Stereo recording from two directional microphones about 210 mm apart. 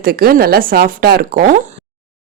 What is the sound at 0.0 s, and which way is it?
A woman's voice, 45° right (ahead or behind).